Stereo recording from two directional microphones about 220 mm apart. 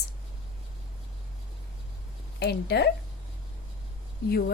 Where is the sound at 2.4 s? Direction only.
45° left (ahead or behind).